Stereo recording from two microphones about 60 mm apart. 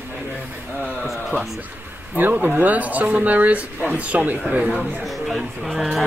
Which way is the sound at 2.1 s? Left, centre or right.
Right.